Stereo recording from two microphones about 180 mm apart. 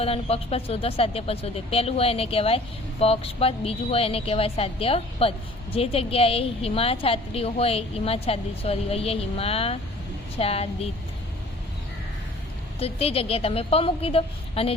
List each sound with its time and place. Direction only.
0.0 s a woman's voice: 30° left (ahead or behind)
12.8 s a woman's voice: 35° left (ahead or behind)